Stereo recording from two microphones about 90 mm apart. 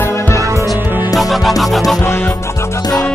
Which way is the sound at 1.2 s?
Centre (ahead or behind).